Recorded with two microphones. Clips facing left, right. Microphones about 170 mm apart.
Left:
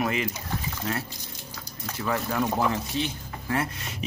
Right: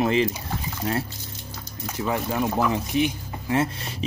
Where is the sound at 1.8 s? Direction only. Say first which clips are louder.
Right 2 dB; 15° right (ahead or behind).